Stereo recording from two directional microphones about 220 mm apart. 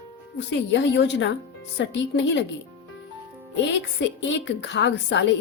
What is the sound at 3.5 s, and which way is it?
Speech, 55° left (ahead or behind).